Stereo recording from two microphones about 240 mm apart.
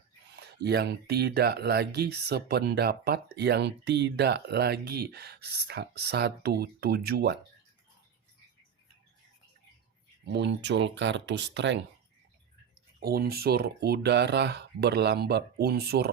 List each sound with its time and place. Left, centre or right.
0.3 s speech: right
10.2 s speech: right
13.0 s speech: right